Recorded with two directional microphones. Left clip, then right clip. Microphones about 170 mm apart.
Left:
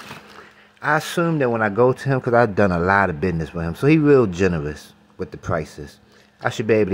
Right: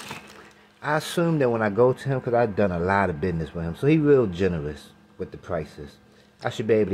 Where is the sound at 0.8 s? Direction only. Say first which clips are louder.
Left 5 dB; 20° left (ahead or behind).